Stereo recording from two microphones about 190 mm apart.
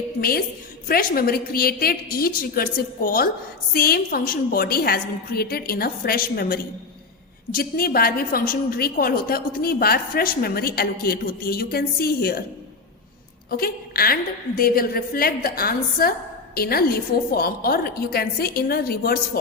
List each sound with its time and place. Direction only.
0.2 s a woman's voice: 50° left (ahead or behind)
13.5 s a woman's voice: 50° left (ahead or behind)